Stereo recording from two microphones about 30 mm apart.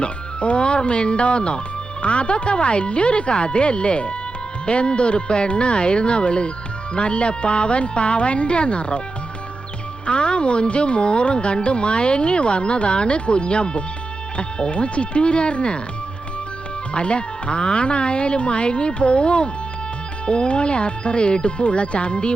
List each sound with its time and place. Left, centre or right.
0.0 s speech: left
10.1 s speech: left
16.9 s speech: left